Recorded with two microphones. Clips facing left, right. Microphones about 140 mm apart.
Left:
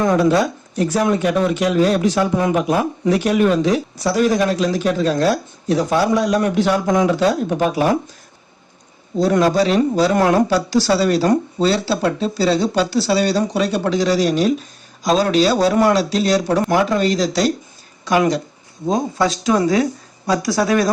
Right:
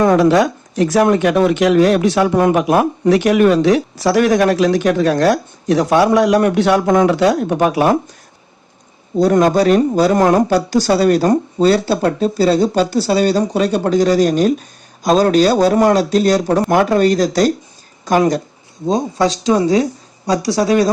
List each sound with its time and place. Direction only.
0.0 s speech: 75° right (ahead or behind)
9.2 s speech: 50° right (ahead or behind)
19.2 s speech: 30° right (ahead or behind)